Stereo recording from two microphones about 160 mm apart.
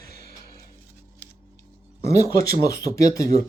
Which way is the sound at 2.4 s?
20° left (ahead or behind).